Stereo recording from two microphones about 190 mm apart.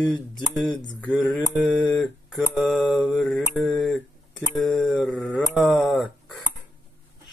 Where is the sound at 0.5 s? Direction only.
5° left (ahead or behind).